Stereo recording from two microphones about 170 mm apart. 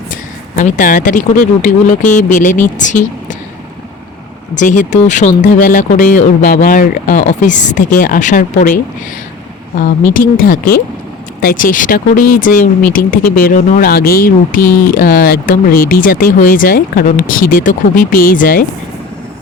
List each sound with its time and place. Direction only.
0.5 s speech: 50° left (ahead or behind)
4.5 s speech: 50° left (ahead or behind)
10.1 s speech: 55° left (ahead or behind)